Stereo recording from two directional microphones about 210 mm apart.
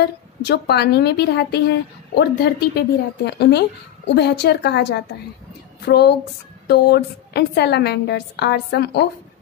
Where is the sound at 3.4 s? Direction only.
50° left (ahead or behind).